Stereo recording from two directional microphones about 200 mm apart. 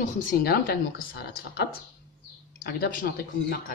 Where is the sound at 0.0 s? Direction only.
45° left (ahead or behind).